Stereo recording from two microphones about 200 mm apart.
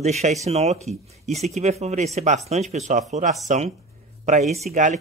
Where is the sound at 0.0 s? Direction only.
35° right (ahead or behind).